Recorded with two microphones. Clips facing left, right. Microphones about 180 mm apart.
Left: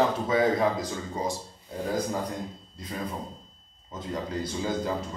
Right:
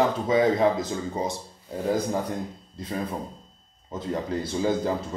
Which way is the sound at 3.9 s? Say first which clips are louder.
Right 4 dB; 25° right (ahead or behind).